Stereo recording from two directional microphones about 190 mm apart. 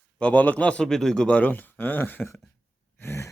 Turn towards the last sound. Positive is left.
turn(degrees=15)  # may be behind; listen again after turning